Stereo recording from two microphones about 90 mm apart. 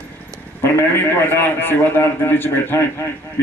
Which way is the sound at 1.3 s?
25° left (ahead or behind).